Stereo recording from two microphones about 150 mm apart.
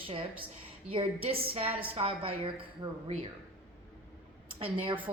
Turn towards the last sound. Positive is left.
turn(degrees=-35)  # may be behind; listen again after turning